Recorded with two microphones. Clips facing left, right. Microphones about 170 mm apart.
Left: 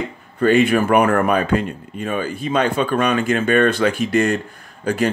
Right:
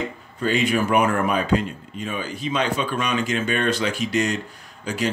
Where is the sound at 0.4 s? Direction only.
55° left (ahead or behind).